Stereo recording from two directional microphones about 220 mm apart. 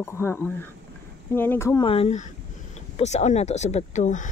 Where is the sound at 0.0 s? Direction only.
10° left (ahead or behind).